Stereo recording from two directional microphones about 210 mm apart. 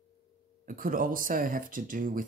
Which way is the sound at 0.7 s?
40° right (ahead or behind).